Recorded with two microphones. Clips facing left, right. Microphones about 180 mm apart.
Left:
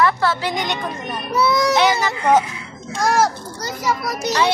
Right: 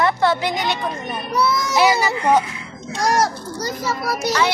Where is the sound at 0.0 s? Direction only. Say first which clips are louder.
Right 1 dB; 20° right (ahead or behind).